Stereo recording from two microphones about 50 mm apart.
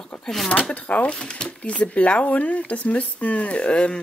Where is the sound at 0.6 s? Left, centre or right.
Left.